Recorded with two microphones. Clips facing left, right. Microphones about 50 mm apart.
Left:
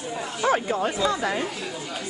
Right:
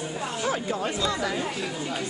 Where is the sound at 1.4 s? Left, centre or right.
Right.